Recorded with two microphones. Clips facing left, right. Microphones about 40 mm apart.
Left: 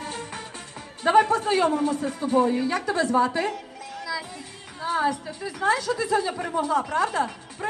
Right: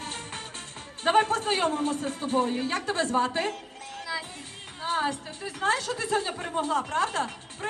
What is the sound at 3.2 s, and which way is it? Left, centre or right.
Music, right.